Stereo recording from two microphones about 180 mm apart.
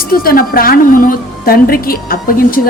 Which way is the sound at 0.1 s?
55° left (ahead or behind).